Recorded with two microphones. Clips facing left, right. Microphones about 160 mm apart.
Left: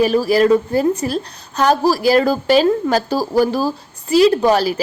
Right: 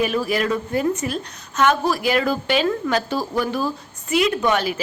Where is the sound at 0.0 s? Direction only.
35° left (ahead or behind).